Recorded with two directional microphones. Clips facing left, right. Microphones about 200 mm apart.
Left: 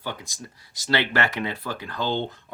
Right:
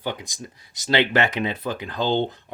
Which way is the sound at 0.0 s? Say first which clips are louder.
Right 4 dB; 20° right (ahead or behind).